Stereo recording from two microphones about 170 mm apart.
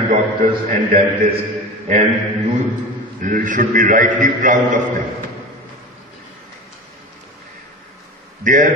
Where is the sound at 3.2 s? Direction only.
50° right (ahead or behind).